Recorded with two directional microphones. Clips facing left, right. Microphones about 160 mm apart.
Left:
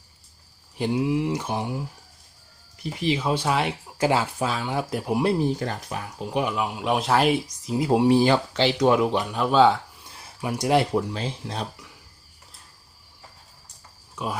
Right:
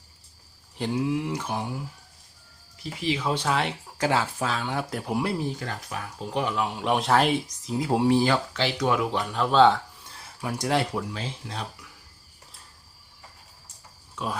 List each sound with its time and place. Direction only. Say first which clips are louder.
0.8 s speech: left 3 dB; 15° left (ahead or behind)
3.2 s speech: left 2 dB; 10° left (ahead or behind)
5.5 s speech: left 4 dB; 30° left (ahead or behind)
6.1 s speech: left 2 dB; 10° left (ahead or behind)
7.7 s speech: left 3 dB; 15° left (ahead or behind)
9.3 s speech: right 1 dB; 10° left (ahead or behind)
10.9 s speech: left 6 dB; 30° left (ahead or behind)